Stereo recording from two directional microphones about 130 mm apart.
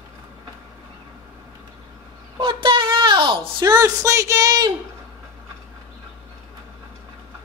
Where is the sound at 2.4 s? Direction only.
40° right (ahead or behind).